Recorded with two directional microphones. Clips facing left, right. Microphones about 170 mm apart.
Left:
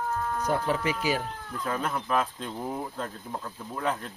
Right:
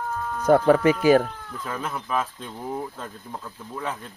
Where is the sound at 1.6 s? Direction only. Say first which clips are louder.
Left 1 dB; centre (ahead or behind).